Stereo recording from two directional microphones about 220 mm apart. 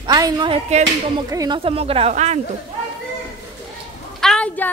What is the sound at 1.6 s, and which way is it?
Speech, 25° right (ahead or behind).